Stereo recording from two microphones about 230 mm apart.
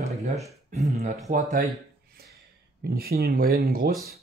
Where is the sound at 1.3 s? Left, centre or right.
Right.